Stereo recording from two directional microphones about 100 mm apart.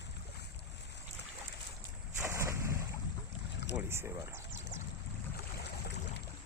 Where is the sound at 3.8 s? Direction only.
25° right (ahead or behind).